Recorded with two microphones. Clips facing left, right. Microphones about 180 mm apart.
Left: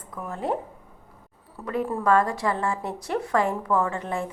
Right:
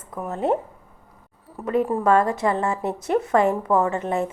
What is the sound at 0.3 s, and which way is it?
A woman's voice, 20° right (ahead or behind).